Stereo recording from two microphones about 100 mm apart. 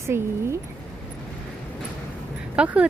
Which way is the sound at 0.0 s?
25° right (ahead or behind).